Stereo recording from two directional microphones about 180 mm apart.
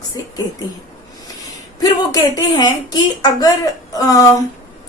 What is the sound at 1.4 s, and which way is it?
Speech, 20° left (ahead or behind).